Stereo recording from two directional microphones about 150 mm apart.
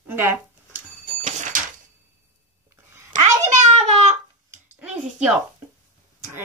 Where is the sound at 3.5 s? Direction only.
50° right (ahead or behind).